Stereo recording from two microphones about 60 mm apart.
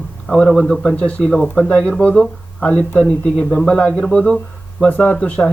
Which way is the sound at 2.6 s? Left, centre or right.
Left.